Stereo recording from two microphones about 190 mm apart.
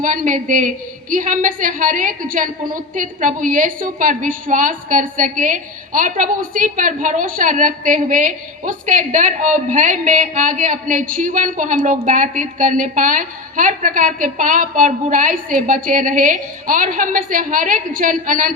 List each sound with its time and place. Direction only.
0.0 s a woman's voice: 45° right (ahead or behind)